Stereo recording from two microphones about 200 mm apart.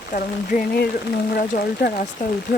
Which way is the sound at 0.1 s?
45° left (ahead or behind).